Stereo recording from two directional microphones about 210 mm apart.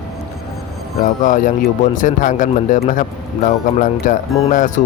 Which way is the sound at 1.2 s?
40° left (ahead or behind).